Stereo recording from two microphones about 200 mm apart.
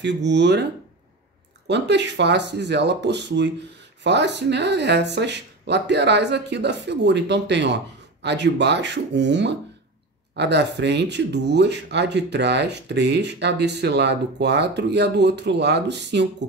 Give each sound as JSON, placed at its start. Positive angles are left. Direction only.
{"t": 0.0, "sound": "speech", "side_deg": -60}
{"t": 1.7, "sound": "speech", "side_deg": -60}